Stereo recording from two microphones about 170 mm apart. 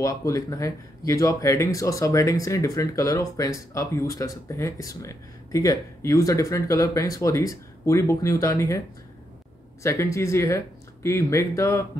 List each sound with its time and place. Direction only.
0.0 s speech: 20° left (ahead or behind)
9.8 s speech: 15° left (ahead or behind)